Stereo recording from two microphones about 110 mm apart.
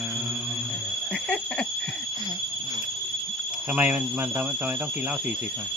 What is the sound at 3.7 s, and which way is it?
Speech, 15° right (ahead or behind).